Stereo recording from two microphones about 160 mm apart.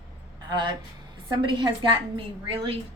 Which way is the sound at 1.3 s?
30° right (ahead or behind).